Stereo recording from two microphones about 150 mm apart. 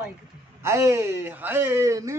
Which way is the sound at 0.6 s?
20° right (ahead or behind).